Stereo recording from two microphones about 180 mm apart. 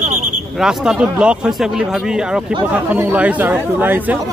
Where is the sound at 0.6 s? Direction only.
5° right (ahead or behind).